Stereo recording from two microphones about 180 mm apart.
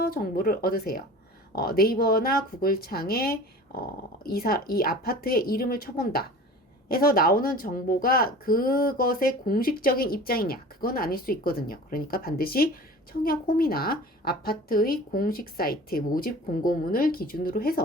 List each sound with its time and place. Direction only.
0.0 s a woman's voice: 55° left (ahead or behind)